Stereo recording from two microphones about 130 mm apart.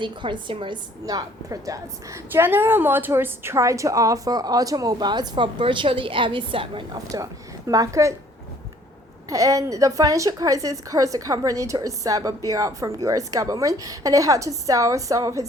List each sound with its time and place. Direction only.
0.0 s a woman's voice: 40° right (ahead or behind)
1.0 s a woman's voice: 25° right (ahead or behind)
9.3 s a woman's voice: 25° right (ahead or behind)